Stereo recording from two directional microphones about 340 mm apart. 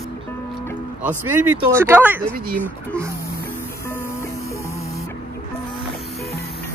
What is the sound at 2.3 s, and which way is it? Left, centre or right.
Speech, right.